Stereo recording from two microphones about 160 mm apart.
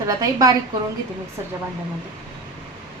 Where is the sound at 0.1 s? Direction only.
25° right (ahead or behind).